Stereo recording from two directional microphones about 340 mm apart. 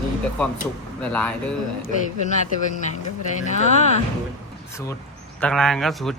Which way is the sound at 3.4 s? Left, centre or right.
Left.